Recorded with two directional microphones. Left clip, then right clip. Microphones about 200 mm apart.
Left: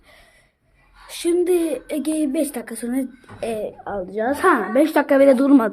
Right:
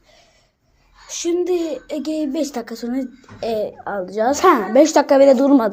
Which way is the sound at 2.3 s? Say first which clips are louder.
Even; centre (ahead or behind).